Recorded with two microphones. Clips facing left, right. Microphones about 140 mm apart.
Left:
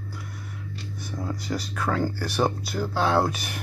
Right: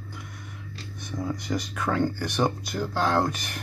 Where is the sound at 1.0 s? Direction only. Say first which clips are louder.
Right 2 dB; 5° left (ahead or behind).